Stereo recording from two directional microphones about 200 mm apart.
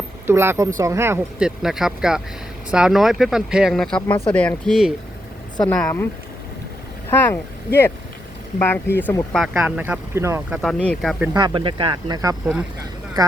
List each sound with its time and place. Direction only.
0.3 s speech: 10° right (ahead or behind); by 6.1 s 5° left (ahead or behind)
7.1 s speech: 10° left (ahead or behind); by 10.6 s 15° right (ahead or behind)
10.6 s speech: 5° left (ahead or behind)
11.3 s speech: 20° right (ahead or behind)